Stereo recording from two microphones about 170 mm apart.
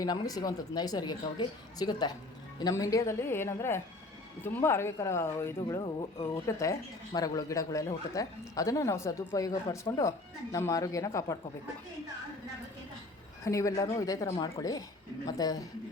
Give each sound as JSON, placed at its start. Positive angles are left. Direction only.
{"t": 0.0, "sound": "speech", "side_deg": 20}
{"t": 13.4, "sound": "speech", "side_deg": 20}